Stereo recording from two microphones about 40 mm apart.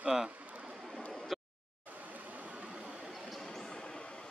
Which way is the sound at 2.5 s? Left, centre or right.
Right.